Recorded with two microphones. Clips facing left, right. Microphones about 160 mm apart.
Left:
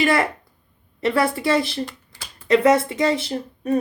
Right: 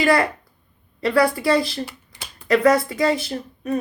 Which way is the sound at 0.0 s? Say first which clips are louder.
Right 1 dB; 25° left (ahead or behind).